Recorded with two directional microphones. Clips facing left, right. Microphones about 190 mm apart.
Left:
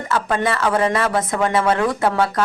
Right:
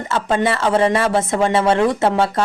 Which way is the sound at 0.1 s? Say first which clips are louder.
Right 2 dB; 25° right (ahead or behind).